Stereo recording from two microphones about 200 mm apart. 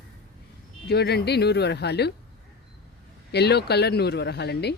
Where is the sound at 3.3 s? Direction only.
55° left (ahead or behind).